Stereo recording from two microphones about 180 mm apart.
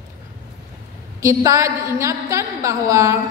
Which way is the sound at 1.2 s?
15° right (ahead or behind).